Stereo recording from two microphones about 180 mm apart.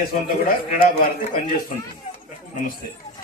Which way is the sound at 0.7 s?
50° left (ahead or behind).